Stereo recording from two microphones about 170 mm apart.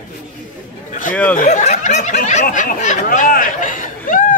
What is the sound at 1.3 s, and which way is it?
Speech, 45° left (ahead or behind).